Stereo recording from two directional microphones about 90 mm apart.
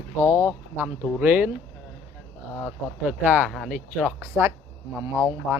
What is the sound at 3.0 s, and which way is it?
Speech, 15° right (ahead or behind).